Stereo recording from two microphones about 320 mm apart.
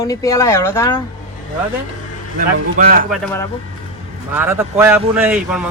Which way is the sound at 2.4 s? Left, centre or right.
Right.